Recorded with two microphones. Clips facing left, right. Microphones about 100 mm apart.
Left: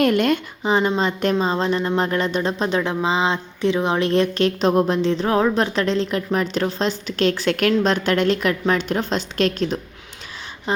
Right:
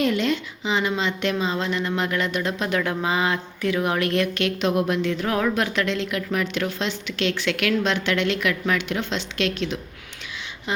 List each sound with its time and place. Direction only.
0.0 s speech: 55° left (ahead or behind); by 10.8 s 35° left (ahead or behind)